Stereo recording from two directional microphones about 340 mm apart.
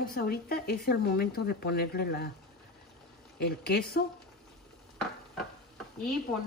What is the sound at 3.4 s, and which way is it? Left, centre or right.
Speech, left.